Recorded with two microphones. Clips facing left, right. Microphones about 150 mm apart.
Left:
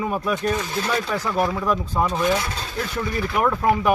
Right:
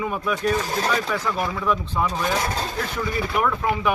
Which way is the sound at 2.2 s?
45° right (ahead or behind).